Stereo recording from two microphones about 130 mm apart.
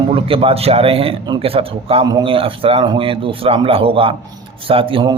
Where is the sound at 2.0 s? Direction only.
35° right (ahead or behind).